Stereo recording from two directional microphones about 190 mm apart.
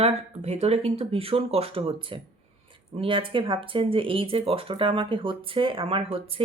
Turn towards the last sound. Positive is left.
turn(degrees=-30)  # may be behind; listen again after turning